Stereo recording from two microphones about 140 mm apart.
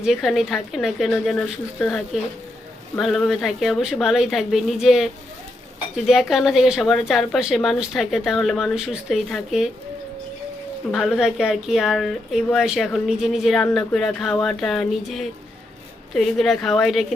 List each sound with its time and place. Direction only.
0.0 s speech: 5° right (ahead or behind)
10.9 s speech: 5° right (ahead or behind)